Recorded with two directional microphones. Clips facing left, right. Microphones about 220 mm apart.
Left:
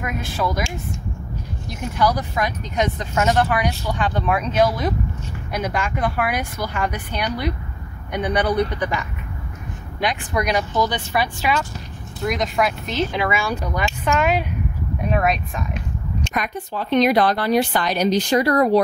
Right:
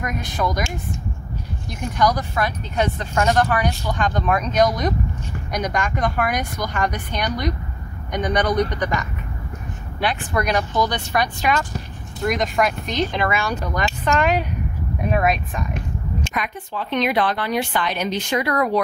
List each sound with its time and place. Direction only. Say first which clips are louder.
0.0 s speech: even; centre (ahead or behind)
16.3 s a woman's voice: left 2 dB; 40° left (ahead or behind)